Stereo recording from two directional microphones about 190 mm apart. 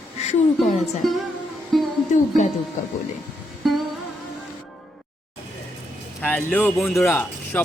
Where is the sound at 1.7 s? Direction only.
Centre (ahead or behind).